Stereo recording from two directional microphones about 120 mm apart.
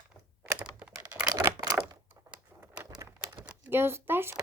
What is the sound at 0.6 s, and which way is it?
Computer keyboard, 10° right (ahead or behind).